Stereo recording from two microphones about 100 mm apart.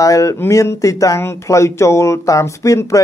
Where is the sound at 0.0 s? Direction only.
35° left (ahead or behind).